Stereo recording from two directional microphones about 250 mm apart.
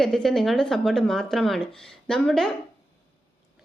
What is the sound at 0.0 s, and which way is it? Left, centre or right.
A woman's voice, centre.